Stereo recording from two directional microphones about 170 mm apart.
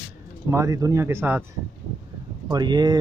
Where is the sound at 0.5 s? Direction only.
20° right (ahead or behind).